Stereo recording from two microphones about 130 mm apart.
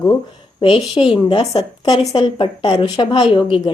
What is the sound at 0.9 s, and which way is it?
Speech, 45° left (ahead or behind).